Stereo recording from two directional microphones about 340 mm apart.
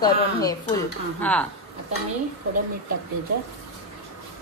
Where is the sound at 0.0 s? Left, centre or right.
Centre.